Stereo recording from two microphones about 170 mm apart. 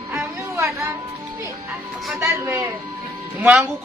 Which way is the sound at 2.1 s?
15° right (ahead or behind).